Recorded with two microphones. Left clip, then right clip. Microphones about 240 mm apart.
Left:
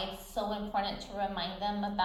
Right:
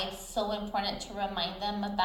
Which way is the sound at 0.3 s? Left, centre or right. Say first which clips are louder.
Right 2 dB; right.